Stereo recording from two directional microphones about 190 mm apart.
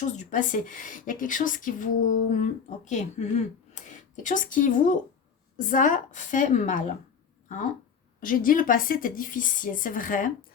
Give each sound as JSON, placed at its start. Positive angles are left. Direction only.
{"t": 0.0, "sound": "a woman's voice", "side_deg": 45}
{"t": 7.4, "sound": "a sound", "side_deg": 40}
{"t": 8.2, "sound": "a woman's voice", "side_deg": 45}